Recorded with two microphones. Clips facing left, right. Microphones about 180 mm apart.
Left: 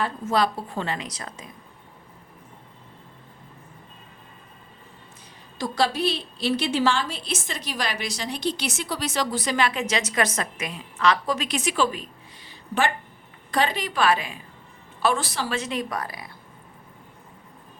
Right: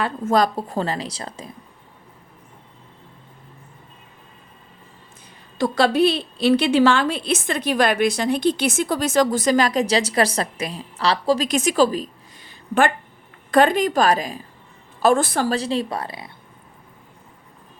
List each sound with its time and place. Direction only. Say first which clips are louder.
0.3 s a woman's voice: right 5 dB; 45° right (ahead or behind)
5.5 s a woman's voice: right 7 dB; 60° right (ahead or behind); by 11.4 s 30° right (ahead or behind)
11.4 s a woman's voice: right 4 dB; 45° right (ahead or behind)
15.0 s a woman's voice: right 7 dB; 50° right (ahead or behind)
15.5 s speech: right 5 dB; 30° right (ahead or behind)